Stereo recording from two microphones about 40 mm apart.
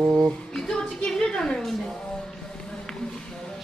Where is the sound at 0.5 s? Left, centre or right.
Centre.